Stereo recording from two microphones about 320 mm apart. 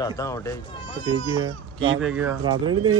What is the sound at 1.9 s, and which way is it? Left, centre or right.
Speech, centre.